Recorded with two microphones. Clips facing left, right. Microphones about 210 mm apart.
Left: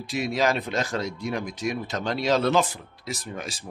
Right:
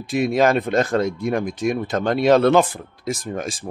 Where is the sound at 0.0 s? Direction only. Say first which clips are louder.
Right 7 dB; 55° right (ahead or behind).